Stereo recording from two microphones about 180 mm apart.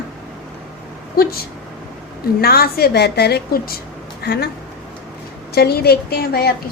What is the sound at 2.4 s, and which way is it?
A woman's voice, 60° left (ahead or behind).